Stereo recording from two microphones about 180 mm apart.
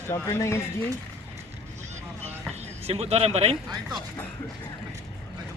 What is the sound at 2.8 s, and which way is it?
Speech, 35° right (ahead or behind).